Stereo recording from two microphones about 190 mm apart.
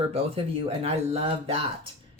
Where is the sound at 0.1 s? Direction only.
30° right (ahead or behind).